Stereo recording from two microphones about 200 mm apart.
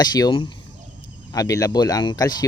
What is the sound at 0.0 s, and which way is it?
Speech, 20° left (ahead or behind).